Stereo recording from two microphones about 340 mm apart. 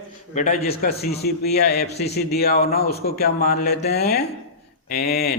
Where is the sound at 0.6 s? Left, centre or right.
Left.